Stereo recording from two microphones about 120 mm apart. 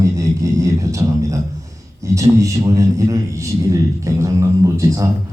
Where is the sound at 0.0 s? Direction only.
25° right (ahead or behind).